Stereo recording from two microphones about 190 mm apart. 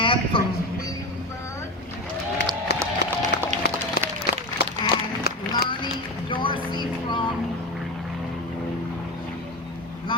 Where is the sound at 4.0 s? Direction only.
55° left (ahead or behind).